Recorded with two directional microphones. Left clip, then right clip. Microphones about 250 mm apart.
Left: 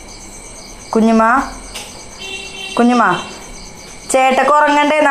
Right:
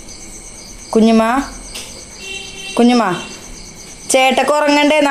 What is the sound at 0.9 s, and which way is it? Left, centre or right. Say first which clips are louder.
Speech: left 1 dB; centre.